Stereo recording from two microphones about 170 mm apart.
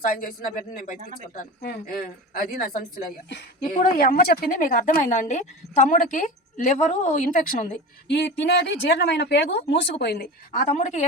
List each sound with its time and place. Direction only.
0.0 s a woman's voice: 55° left (ahead or behind)
8.0 s speech: 90° left
10.0 s speech: 70° left (ahead or behind)
10.5 s a woman's voice: 45° left (ahead or behind)